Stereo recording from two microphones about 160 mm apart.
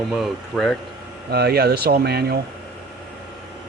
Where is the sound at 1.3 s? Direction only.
85° right.